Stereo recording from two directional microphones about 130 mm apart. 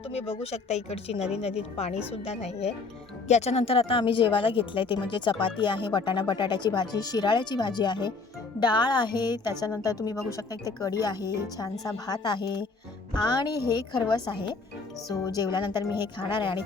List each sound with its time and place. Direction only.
0.1 s speech: 55° left (ahead or behind); by 16.6 s 35° left (ahead or behind)